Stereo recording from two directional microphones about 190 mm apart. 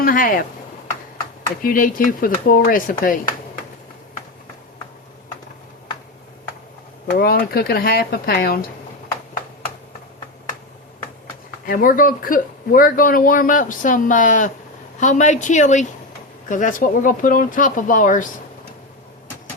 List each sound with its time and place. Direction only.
0.0 s a sound: 45° left (ahead or behind)
1.6 s speech: 45° left (ahead or behind)
7.1 s speech: 50° left (ahead or behind)
11.6 s a woman's voice: 45° left (ahead or behind)